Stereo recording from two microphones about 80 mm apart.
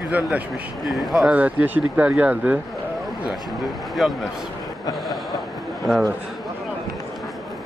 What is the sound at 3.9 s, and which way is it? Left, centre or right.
Speech, centre.